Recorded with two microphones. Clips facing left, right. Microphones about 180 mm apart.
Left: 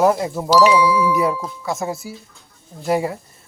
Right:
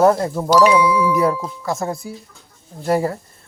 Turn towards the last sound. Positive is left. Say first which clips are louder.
# right 1 dB
turn(degrees=5)  # may be behind; listen again after turning